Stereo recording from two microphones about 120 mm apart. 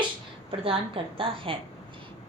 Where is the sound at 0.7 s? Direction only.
50° right (ahead or behind).